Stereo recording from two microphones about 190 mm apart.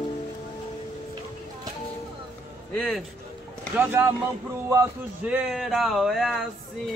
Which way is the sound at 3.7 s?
10° right (ahead or behind).